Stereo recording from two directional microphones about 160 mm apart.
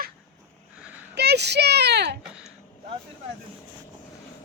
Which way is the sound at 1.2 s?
90° right.